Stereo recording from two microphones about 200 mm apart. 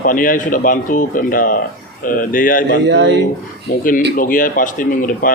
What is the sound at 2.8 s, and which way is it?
Speech, 60° right (ahead or behind).